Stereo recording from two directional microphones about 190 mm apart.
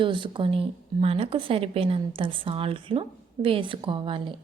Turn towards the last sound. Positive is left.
turn(degrees=-25)  # may be behind; listen again after turning